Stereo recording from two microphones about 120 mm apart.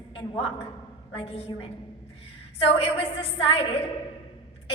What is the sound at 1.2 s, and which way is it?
A woman's voice, 55° left (ahead or behind).